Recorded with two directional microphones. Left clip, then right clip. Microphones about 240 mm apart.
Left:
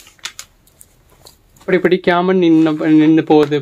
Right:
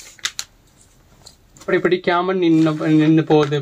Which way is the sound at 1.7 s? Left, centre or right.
Left.